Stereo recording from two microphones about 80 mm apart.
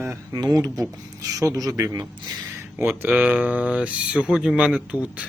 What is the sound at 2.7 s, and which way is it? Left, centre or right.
Speech, right.